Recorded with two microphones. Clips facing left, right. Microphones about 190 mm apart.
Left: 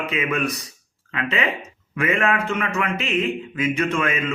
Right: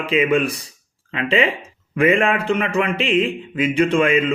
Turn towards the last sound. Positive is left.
turn(degrees=-30)  # may be behind; listen again after turning